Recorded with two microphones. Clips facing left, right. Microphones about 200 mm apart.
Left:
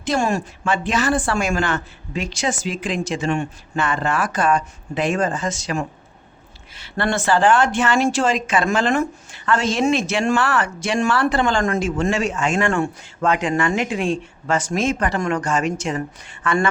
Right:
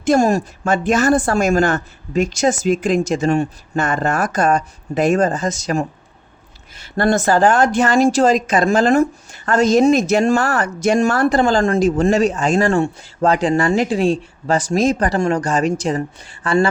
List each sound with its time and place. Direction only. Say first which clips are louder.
0.0 s speech: right 6 dB; 45° right (ahead or behind)